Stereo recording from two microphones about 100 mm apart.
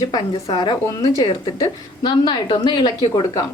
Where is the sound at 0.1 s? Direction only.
45° left (ahead or behind).